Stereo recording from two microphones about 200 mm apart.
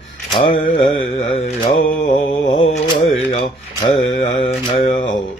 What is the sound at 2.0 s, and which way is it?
Mantra, 30° left (ahead or behind).